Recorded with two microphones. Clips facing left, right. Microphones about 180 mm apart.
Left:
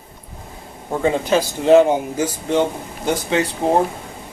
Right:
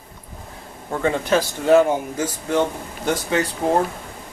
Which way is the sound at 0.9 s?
15° left (ahead or behind).